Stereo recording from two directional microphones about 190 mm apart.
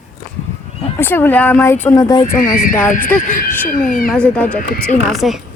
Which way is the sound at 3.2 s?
45° left (ahead or behind).